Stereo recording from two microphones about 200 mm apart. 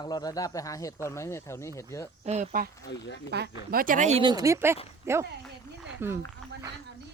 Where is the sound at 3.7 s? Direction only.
45° right (ahead or behind).